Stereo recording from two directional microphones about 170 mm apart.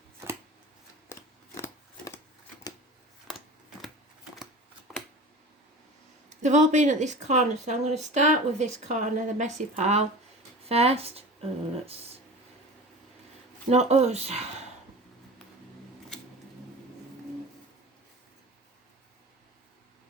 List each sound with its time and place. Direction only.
3.2 s scissors: centre (ahead or behind)
6.4 s speech: 45° right (ahead or behind)
13.7 s speech: 40° right (ahead or behind)